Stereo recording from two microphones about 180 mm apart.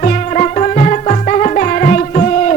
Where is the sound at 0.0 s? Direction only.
40° left (ahead or behind).